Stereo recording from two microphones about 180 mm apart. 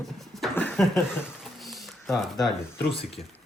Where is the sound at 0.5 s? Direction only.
5° left (ahead or behind).